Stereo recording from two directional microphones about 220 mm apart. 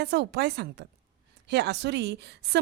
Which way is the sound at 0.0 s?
50° right (ahead or behind).